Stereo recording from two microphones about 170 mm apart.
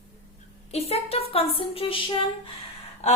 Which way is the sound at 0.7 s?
35° left (ahead or behind).